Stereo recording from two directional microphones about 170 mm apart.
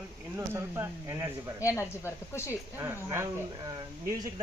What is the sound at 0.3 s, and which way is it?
Speech, 15° right (ahead or behind).